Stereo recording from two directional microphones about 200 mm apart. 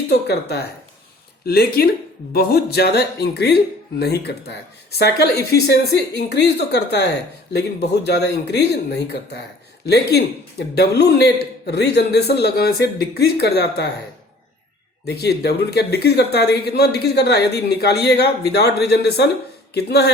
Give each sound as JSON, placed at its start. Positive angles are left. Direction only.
{"t": 0.1, "sound": "speech", "side_deg": 55}
{"t": 15.0, "sound": "speech", "side_deg": 55}